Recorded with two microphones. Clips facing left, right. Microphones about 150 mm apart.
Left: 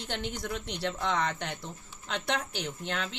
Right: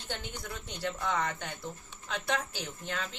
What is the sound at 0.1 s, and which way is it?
Speech, 80° left.